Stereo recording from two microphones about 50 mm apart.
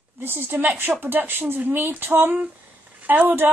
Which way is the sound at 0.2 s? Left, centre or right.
Right.